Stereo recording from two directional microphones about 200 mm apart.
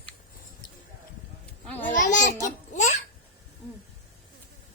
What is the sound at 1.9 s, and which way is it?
Speech, 40° left (ahead or behind).